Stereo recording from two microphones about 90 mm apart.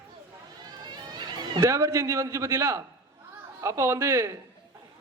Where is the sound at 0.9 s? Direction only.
50° right (ahead or behind).